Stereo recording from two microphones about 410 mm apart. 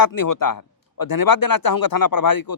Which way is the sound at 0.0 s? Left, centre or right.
Left.